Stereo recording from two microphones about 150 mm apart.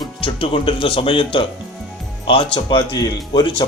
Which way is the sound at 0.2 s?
35° left (ahead or behind).